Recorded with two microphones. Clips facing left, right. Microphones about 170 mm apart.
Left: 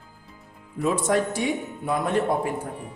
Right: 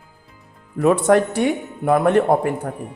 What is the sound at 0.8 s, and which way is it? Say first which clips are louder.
Speech: right 8 dB; 60° right (ahead or behind).